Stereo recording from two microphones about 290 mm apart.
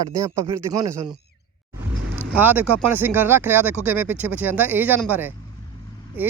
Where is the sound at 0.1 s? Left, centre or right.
Centre.